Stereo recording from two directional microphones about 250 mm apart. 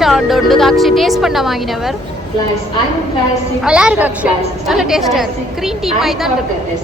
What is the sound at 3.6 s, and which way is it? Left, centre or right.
Speech, centre.